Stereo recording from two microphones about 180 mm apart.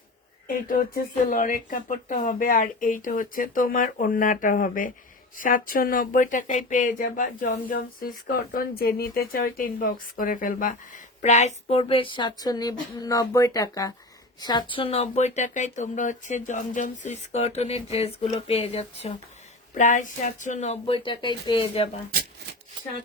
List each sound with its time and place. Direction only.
0.4 s speech: 50° left (ahead or behind); by 19.1 s 35° left (ahead or behind)
19.7 s speech: 45° left (ahead or behind); by 21.8 s 30° left (ahead or behind)